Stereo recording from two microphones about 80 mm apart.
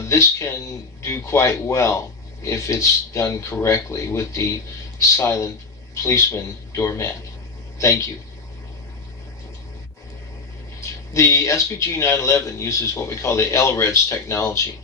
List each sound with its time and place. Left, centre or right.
0.1 s speech: left
10.8 s speech: left